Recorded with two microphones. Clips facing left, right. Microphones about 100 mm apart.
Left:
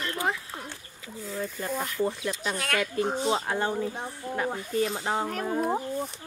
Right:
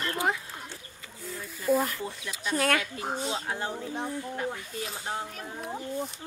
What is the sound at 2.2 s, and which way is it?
Speech, 45° left (ahead or behind).